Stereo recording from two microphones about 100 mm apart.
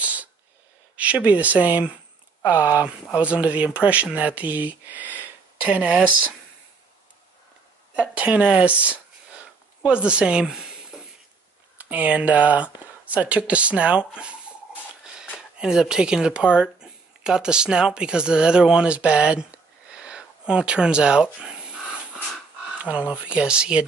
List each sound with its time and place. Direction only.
0.0 s a sound: 15° right (ahead or behind)
0.9 s speech: 15° right (ahead or behind)
7.9 s speech: 15° right (ahead or behind)
15.3 s speech: 5° right (ahead or behind)
22.8 s speech: 15° right (ahead or behind)